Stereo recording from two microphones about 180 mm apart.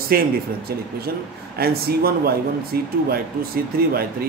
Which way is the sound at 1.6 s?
55° right (ahead or behind).